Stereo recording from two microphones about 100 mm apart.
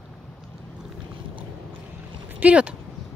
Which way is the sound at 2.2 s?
15° right (ahead or behind).